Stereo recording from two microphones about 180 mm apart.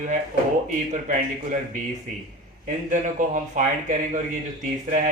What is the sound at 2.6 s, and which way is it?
Speech, 45° right (ahead or behind).